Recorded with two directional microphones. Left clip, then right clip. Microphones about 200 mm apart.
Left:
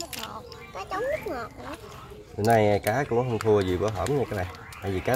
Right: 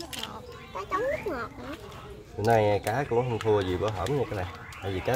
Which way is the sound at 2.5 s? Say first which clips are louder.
Left 2 dB; 40° left (ahead or behind).